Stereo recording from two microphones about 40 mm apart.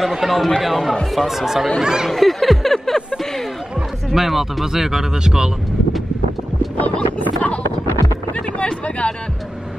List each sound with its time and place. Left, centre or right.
0.2 s speech: centre
2.0 s music: centre
4.1 s speech: centre
6.8 s speech: left
8.6 s speech: left